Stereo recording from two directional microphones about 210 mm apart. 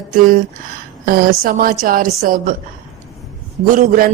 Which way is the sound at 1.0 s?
45° right (ahead or behind).